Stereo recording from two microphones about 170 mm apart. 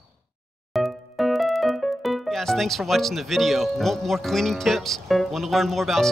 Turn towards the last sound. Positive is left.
turn(degrees=0)  # may be behind; listen again after turning